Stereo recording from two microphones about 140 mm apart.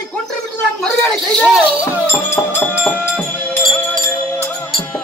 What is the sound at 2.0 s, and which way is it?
Music, 15° left (ahead or behind).